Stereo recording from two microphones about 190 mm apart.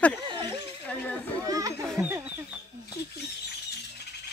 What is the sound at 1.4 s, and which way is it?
Children playing, 20° right (ahead or behind).